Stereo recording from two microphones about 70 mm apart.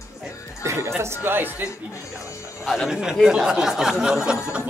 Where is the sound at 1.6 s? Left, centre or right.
Left.